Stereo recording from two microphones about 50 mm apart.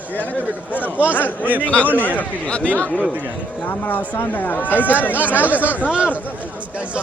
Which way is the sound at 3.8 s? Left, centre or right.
Left.